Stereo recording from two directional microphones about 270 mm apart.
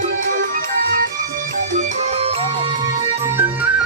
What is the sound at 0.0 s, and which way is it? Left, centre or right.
Music, right.